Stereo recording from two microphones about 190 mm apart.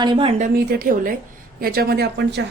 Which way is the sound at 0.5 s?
50° right (ahead or behind).